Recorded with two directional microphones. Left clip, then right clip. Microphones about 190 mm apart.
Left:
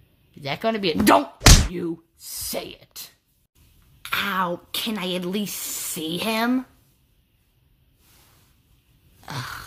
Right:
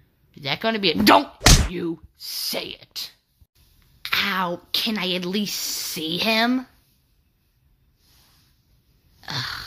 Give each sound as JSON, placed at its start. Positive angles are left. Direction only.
{"t": 0.3, "sound": "speech", "side_deg": -5}
{"t": 4.0, "sound": "a woman's voice", "side_deg": 5}
{"t": 9.2, "sound": "a sound", "side_deg": 5}